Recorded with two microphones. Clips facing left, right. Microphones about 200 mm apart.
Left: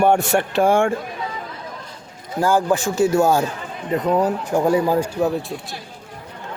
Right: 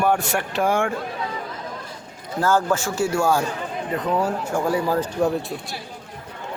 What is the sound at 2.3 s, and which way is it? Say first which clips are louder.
Speech: left 2 dB; 15° left (ahead or behind).